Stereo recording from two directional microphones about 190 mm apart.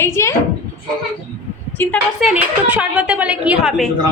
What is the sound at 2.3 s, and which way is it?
A woman's voice, 5° right (ahead or behind).